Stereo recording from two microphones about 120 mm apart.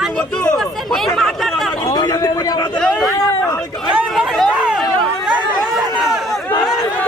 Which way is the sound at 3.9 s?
10° right (ahead or behind).